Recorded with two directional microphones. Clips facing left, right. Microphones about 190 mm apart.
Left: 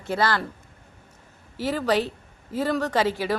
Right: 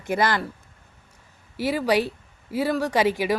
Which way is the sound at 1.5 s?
10° right (ahead or behind).